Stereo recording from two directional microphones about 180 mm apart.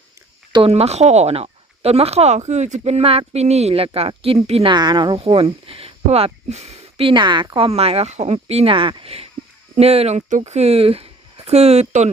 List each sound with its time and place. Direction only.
0.5 s speech: 30° right (ahead or behind)